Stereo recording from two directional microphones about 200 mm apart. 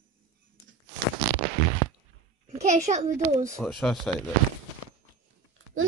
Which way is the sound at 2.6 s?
35° right (ahead or behind).